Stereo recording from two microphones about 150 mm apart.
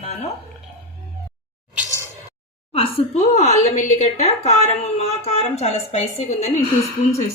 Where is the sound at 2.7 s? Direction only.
40° left (ahead or behind).